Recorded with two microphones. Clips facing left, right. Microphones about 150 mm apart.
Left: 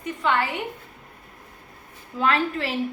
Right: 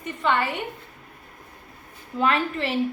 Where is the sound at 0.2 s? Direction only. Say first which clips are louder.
Even; centre (ahead or behind).